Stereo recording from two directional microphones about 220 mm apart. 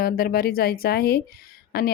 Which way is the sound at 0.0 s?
45° left (ahead or behind).